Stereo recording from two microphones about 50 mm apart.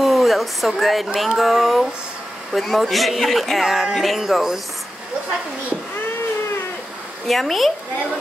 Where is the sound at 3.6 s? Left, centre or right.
Centre.